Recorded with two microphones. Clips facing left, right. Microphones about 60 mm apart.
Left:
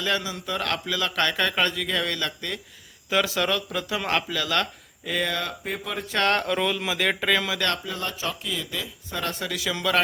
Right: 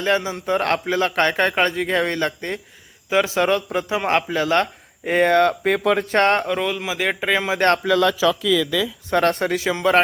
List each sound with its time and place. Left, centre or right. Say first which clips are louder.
0.0 s speech: right 6 dB; right
6.1 s speech: right 4 dB; right
6.4 s speech: right 2 dB; centre
7.9 s speech: right 14 dB; right
9.0 s speech: right 12 dB; right